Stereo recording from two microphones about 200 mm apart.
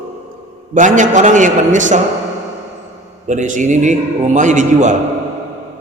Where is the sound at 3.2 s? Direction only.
40° right (ahead or behind).